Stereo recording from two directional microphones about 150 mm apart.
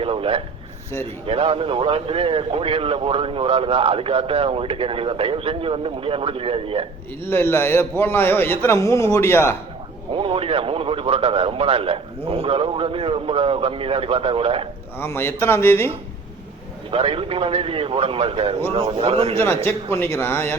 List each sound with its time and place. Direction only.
0.0 s a sound: 40° right (ahead or behind)
1.3 s a man's voice: 40° right (ahead or behind)
7.3 s a man's voice: 15° left (ahead or behind)
10.1 s a man's voice: 35° right (ahead or behind)
14.9 s a man's voice: 15° left (ahead or behind)
16.9 s a man's voice: 40° right (ahead or behind)
19.6 s a man's voice: 15° left (ahead or behind)